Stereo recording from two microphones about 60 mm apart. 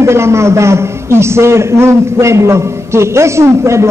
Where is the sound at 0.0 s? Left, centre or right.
Right.